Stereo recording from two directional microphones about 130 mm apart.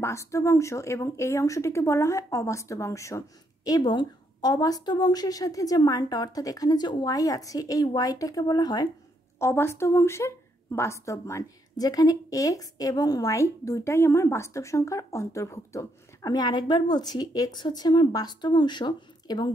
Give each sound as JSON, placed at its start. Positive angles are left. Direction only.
{"t": 0.0, "sound": "a woman's voice", "side_deg": 20}
{"t": 9.4, "sound": "a woman's voice", "side_deg": 20}